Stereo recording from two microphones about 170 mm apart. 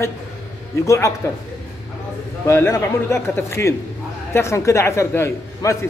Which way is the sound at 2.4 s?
15° left (ahead or behind).